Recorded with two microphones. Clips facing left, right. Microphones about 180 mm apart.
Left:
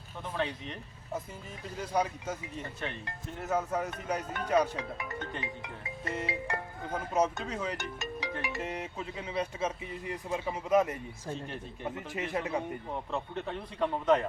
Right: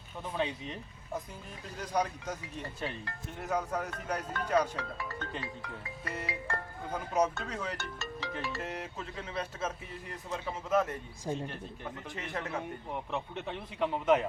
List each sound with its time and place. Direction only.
0.3 s a man's voice: 10° right (ahead or behind)
1.8 s speech: 5° left (ahead or behind)
6.5 s speech: 5° left (ahead or behind)
8.6 s speech: centre (ahead or behind)
11.3 s a man's voice: 15° right (ahead or behind)
11.8 s speech: 15° left (ahead or behind)
13.1 s a man's voice: 5° right (ahead or behind)